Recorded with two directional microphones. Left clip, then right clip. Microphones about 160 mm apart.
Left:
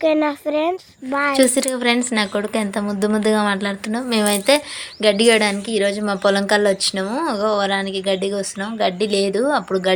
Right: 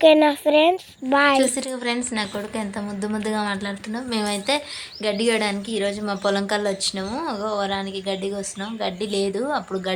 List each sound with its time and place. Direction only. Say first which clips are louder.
0.0 s speech: right 3 dB; 5° right (ahead or behind)
1.4 s a woman's voice: left 5 dB; 35° left (ahead or behind)